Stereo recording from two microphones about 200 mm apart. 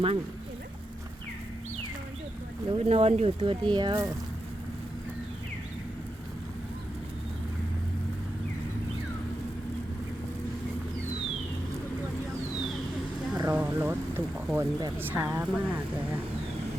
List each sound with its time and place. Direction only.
2.6 s speech: 30° right (ahead or behind)
13.3 s speech: 15° right (ahead or behind)